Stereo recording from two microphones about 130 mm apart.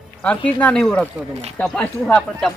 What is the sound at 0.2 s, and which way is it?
Speech, 10° left (ahead or behind).